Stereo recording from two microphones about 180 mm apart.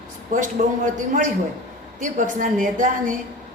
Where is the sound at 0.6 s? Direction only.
50° right (ahead or behind).